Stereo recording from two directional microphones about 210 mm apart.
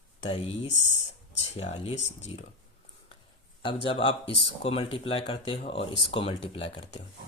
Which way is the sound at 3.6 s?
25° left (ahead or behind).